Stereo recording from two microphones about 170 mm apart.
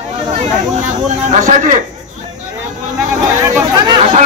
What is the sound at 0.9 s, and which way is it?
Speech, 45° right (ahead or behind).